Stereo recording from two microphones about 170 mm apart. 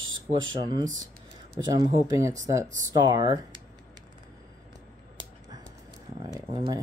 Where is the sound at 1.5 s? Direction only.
20° right (ahead or behind).